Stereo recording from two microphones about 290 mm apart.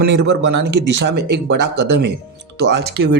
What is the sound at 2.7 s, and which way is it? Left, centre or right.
Speech, right.